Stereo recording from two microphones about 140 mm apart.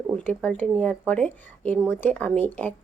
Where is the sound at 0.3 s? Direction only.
15° left (ahead or behind).